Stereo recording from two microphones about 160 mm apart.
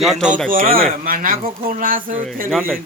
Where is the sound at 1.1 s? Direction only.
60° right (ahead or behind).